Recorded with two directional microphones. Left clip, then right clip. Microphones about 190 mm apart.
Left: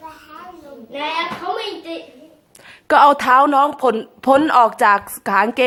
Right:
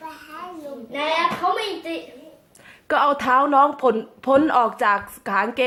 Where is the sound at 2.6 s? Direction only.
25° left (ahead or behind).